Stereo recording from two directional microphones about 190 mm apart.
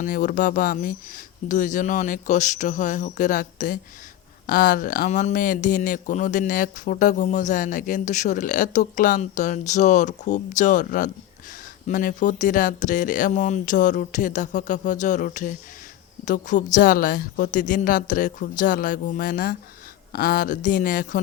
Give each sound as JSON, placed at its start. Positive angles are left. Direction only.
{"t": 0.0, "sound": "speech", "side_deg": 45}